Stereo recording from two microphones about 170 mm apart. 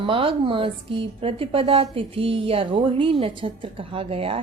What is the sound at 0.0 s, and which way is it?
A woman's voice, 30° right (ahead or behind).